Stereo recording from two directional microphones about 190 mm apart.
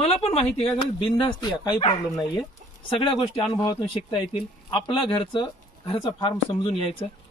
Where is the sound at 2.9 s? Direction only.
25° left (ahead or behind).